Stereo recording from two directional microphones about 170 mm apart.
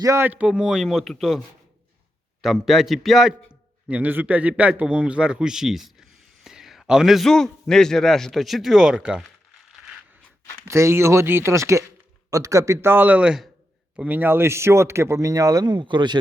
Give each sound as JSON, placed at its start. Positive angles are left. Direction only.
{"t": 0.0, "sound": "speech", "side_deg": -15}
{"t": 2.4, "sound": "a man's voice", "side_deg": 0}
{"t": 10.7, "sound": "a man's voice", "side_deg": -15}